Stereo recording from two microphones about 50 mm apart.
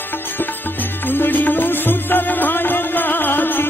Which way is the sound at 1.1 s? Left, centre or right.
Left.